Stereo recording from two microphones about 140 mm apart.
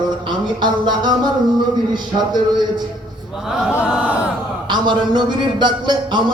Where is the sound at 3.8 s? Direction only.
5° right (ahead or behind).